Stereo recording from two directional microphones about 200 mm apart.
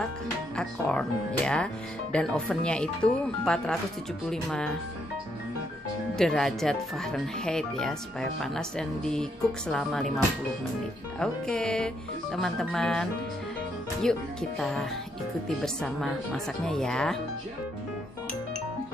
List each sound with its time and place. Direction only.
0.6 s speech: 5° left (ahead or behind)
6.1 s speech: 5° left (ahead or behind)
11.1 s speech: 5° left (ahead or behind)
14.6 s speech: centre (ahead or behind)